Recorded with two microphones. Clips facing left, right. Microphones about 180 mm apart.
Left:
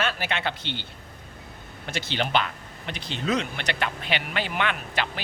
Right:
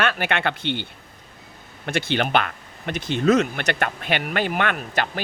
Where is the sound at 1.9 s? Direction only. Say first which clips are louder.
Right 5 dB; 55° right (ahead or behind).